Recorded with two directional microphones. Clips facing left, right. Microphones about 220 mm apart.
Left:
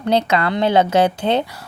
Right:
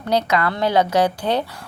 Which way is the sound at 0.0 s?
25° left (ahead or behind).